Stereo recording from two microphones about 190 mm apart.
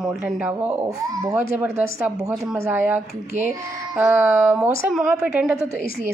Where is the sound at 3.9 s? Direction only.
10° right (ahead or behind).